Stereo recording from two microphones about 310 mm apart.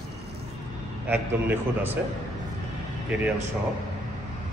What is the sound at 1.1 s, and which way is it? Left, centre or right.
Speech, centre.